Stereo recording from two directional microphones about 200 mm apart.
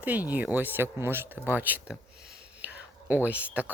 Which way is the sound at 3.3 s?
5° right (ahead or behind).